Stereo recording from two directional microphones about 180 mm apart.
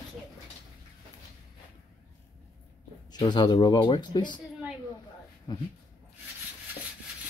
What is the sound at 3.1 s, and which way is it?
Speech, 25° left (ahead or behind).